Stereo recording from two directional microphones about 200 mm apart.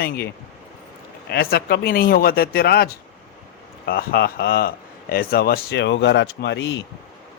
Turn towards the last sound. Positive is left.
turn(degrees=60)  # may be behind; listen again after turning